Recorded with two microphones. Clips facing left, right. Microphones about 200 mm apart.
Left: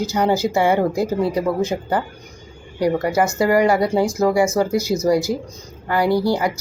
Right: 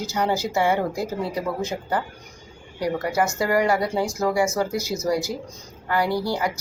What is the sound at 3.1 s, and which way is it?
Speech, 15° left (ahead or behind).